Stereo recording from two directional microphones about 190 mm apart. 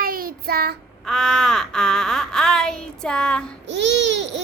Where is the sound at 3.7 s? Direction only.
70° right (ahead or behind).